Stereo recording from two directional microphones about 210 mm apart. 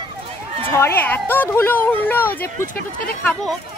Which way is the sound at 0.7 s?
10° left (ahead or behind).